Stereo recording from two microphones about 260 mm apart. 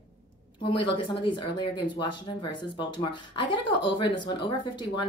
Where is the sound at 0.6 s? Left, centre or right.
Centre.